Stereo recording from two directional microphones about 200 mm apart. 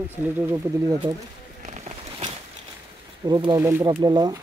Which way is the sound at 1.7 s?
35° right (ahead or behind).